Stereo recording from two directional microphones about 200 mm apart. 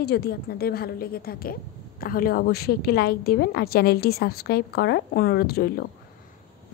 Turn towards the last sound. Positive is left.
turn(degrees=50)  # may be behind; listen again after turning